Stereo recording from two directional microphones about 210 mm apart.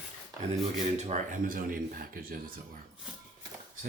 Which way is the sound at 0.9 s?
35° right (ahead or behind).